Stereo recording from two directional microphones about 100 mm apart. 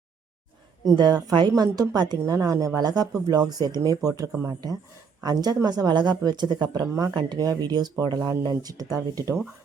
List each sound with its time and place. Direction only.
0.9 s a woman's voice: 45° right (ahead or behind)
2.2 s a woman's voice: 35° right (ahead or behind)